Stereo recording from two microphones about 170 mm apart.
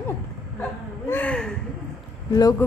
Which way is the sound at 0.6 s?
10° left (ahead or behind).